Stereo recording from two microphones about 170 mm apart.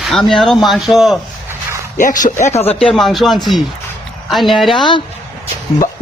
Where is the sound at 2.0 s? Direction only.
50° left (ahead or behind).